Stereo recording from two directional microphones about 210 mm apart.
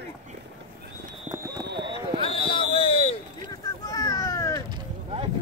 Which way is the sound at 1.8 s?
20° right (ahead or behind).